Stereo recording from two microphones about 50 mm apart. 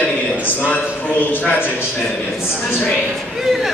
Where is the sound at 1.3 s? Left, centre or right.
Left.